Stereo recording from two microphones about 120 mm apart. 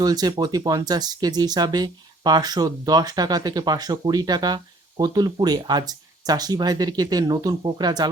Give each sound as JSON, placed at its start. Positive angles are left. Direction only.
{"t": 0.0, "sound": "speech", "side_deg": -35}